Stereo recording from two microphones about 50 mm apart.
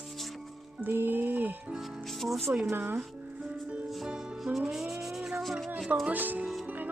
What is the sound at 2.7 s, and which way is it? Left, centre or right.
Music, right.